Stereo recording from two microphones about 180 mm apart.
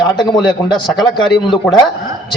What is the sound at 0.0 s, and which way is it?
Speech, 25° left (ahead or behind).